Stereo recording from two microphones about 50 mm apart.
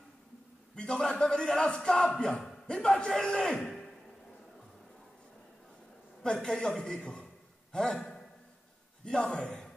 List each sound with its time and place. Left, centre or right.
0.7 s a man's voice: centre
6.2 s a man's voice: centre